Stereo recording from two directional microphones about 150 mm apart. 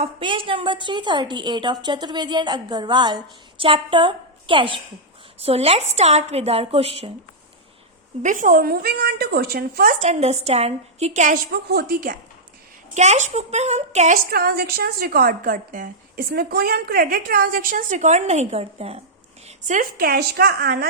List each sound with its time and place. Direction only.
0.0 s a woman's voice: 35° right (ahead or behind)
8.2 s speech: 60° right (ahead or behind)
10.0 s a woman's voice: 45° right (ahead or behind)
11.5 s a woman's voice: 90° right
12.9 s a woman's voice: 50° right (ahead or behind)
14.3 s a woman's voice: 90° right; by 19.0 s 45° right (ahead or behind)
19.5 s a woman's voice: 55° right (ahead or behind); by 20.8 s 90° right